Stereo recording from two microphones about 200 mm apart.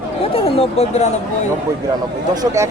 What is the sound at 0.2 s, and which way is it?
Speech, 30° left (ahead or behind).